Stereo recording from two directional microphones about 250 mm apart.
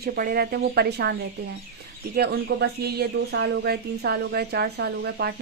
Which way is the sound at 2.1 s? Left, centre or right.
Right.